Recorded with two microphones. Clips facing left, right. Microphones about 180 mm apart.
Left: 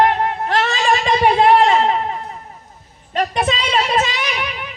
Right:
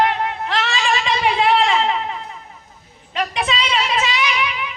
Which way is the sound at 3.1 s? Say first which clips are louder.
Left 4 dB; 45° left (ahead or behind).